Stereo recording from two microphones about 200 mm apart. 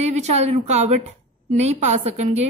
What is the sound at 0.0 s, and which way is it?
A woman's voice, 35° right (ahead or behind).